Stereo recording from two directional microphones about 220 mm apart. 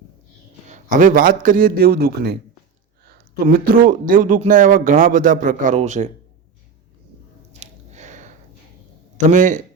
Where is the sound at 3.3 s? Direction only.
40° right (ahead or behind).